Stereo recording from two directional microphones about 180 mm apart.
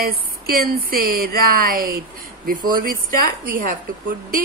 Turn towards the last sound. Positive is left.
turn(degrees=-50)  # may be behind; listen again after turning